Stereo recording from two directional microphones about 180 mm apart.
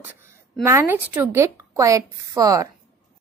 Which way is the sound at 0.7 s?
15° right (ahead or behind).